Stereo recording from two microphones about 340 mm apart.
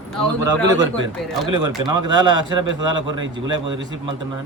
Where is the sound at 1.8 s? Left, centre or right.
Centre.